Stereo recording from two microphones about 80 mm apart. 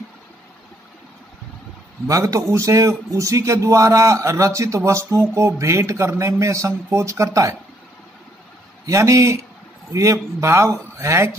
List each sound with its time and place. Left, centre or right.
2.0 s a man's voice: right
8.8 s a man's voice: right